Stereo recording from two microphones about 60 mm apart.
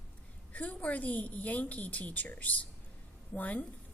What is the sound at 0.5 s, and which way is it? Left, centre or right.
A woman's voice, left.